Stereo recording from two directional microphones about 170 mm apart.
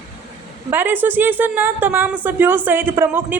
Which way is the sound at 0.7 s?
10° right (ahead or behind).